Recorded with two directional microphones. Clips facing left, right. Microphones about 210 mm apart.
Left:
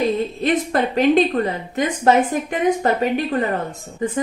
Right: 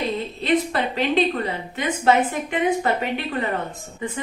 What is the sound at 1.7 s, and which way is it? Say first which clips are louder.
A woman's voice: left 3 dB; 45° left (ahead or behind).